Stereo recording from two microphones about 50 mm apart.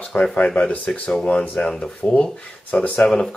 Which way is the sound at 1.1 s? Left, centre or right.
Centre.